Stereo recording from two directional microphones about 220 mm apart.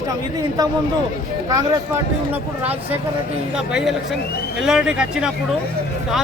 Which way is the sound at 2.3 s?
5° right (ahead or behind).